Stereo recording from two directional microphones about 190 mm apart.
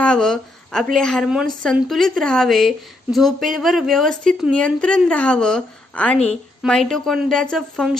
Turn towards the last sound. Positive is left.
turn(degrees=0)  # may be behind; listen again after turning